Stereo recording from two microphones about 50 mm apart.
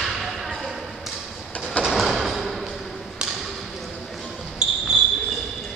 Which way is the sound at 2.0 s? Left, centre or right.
Centre.